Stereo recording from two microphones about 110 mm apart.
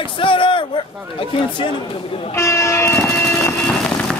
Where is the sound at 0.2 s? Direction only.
50° left (ahead or behind).